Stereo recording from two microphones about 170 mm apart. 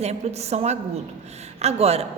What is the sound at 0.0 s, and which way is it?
A man's voice, 40° right (ahead or behind).